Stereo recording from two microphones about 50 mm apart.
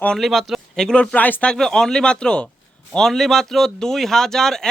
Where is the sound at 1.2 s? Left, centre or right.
Left.